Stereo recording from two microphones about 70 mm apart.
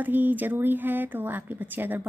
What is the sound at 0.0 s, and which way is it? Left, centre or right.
A woman's voice, right.